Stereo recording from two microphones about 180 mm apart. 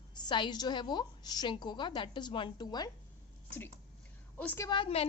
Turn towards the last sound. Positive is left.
turn(degrees=30)  # may be behind; listen again after turning